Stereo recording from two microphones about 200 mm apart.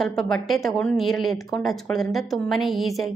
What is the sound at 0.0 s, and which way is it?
Speech, centre (ahead or behind).